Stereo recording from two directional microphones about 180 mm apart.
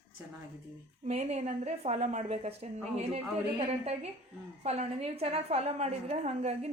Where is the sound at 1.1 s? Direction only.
35° right (ahead or behind).